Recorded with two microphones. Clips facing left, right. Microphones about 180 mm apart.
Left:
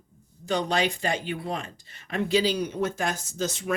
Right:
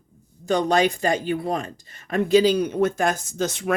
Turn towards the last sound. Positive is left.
turn(degrees=-60)  # may be behind; listen again after turning